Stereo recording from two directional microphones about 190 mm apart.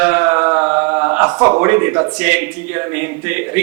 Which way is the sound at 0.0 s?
15° right (ahead or behind).